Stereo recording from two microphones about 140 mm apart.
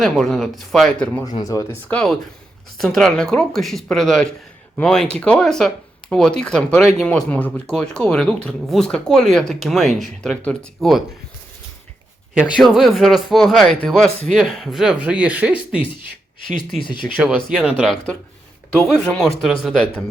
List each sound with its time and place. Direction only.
0.0 s speech: 5° left (ahead or behind)
1.2 s speech: 30° left (ahead or behind)
1.7 s speech: 10° left (ahead or behind)
12.3 s speech: 5° right (ahead or behind)
17.2 s speech: 10° right (ahead or behind)
19.4 s speech: centre (ahead or behind)